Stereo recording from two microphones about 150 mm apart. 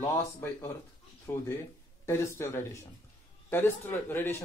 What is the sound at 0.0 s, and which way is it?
Speech, 15° left (ahead or behind).